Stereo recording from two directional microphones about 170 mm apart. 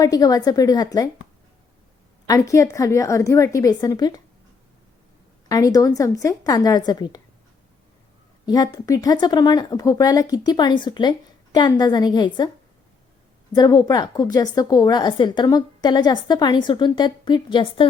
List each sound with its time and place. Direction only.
0.0 s a woman's voice: 20° left (ahead or behind)
2.2 s a woman's voice: 20° left (ahead or behind)
5.5 s a woman's voice: 20° left (ahead or behind)
8.4 s a woman's voice: 20° left (ahead or behind)
13.5 s a woman's voice: 25° left (ahead or behind)